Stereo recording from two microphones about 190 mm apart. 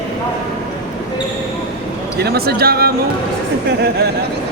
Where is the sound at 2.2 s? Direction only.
55° right (ahead or behind).